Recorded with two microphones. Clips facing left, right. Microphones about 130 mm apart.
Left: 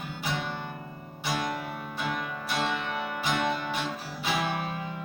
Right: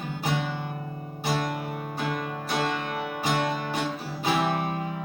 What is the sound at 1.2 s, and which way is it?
Music, 45° right (ahead or behind).